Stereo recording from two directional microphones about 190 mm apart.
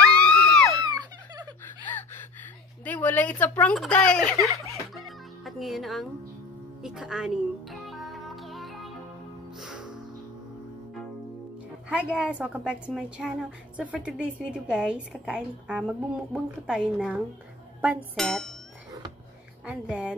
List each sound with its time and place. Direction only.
0.3 s a sound: 5° left (ahead or behind)
0.8 s a sound: 20° right (ahead or behind)
2.8 s speech: 10° left (ahead or behind)
4.9 s music: centre (ahead or behind)
11.9 s a woman's voice: 5° right (ahead or behind)
19.6 s a woman's voice: 5° right (ahead or behind)